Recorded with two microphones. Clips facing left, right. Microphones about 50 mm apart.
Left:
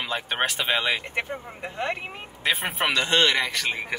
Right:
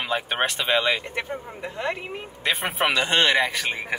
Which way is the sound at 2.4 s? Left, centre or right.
Centre.